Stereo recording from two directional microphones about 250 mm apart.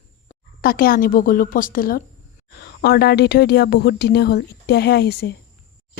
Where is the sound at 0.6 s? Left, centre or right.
Left.